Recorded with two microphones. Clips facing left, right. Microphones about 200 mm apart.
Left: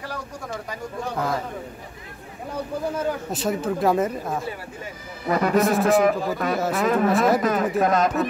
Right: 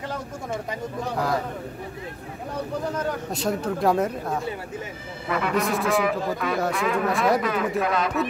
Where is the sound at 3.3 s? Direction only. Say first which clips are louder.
Left 1 dB; centre (ahead or behind).